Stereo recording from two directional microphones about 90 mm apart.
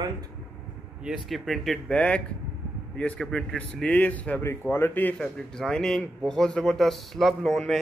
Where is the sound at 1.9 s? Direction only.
15° left (ahead or behind).